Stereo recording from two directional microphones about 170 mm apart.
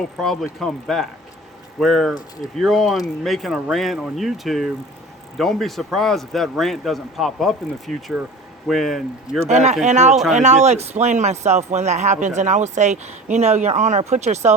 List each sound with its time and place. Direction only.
0.0 s speech: centre (ahead or behind)
9.5 s speech: 40° right (ahead or behind)